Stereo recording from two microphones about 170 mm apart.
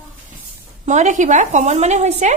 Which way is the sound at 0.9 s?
45° right (ahead or behind).